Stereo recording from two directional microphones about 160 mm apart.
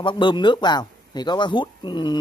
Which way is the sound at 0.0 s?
30° left (ahead or behind).